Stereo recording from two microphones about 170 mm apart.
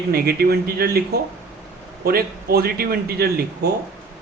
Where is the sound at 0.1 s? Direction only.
65° right (ahead or behind).